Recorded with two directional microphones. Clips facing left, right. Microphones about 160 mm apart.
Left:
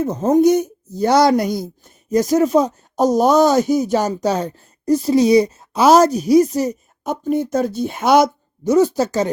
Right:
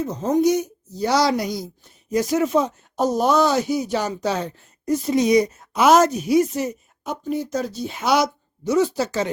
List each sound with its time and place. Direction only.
0.0 s speech: 50° left (ahead or behind)